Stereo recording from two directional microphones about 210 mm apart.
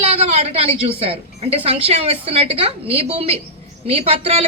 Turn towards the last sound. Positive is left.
turn(degrees=-25)  # may be behind; listen again after turning